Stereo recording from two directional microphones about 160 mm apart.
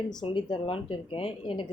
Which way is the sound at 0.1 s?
30° left (ahead or behind).